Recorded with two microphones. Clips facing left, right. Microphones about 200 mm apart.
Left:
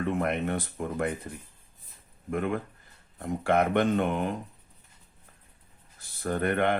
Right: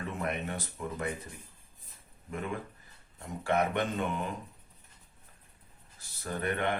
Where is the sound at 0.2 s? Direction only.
55° left (ahead or behind).